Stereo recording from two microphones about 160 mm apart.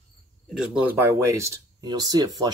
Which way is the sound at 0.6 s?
15° right (ahead or behind).